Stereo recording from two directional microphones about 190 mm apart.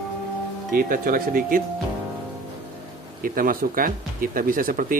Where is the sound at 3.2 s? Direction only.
50° right (ahead or behind).